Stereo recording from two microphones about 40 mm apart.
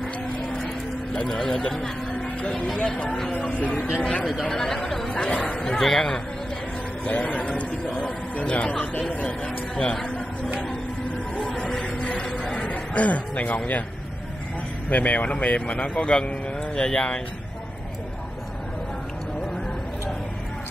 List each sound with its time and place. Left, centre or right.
1.3 s speech: left
2.1 s a sound: left
3.1 s speech: centre
4.0 s speech: left
4.5 s speech: centre
5.1 s speech: left
5.6 s speech: centre
7.1 s speech: left
11.4 s a sound: left
14.9 s speech: left